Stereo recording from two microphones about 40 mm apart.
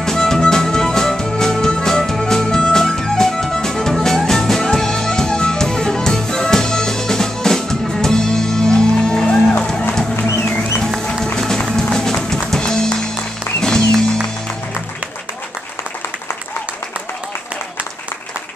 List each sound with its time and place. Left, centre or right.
0.0 s music: centre
11.3 s music: centre